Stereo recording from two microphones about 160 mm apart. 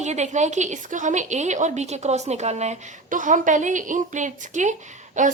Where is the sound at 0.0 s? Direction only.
45° right (ahead or behind).